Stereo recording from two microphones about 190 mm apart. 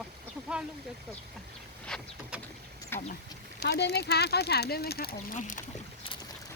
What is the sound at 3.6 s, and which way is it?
Speech, 65° left (ahead or behind).